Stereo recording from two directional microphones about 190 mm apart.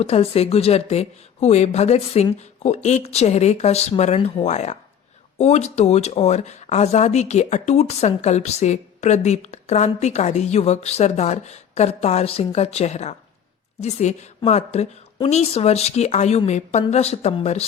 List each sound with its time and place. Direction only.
0.0 s speech: 30° left (ahead or behind)